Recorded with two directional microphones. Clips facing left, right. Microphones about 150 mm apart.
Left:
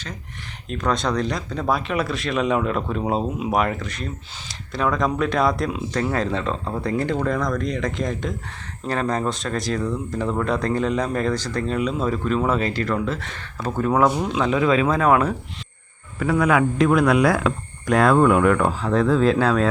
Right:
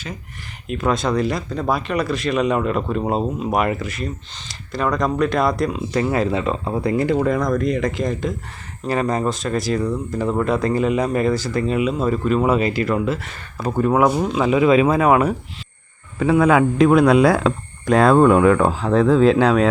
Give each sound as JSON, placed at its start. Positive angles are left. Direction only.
{"t": 0.7, "sound": "speech", "side_deg": -5}
{"t": 16.1, "sound": "speech", "side_deg": -25}
{"t": 19.0, "sound": "speech", "side_deg": -20}